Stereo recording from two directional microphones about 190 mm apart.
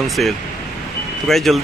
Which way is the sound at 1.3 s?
Centre (ahead or behind).